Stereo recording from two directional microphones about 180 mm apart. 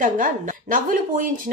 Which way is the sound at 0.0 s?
50° right (ahead or behind).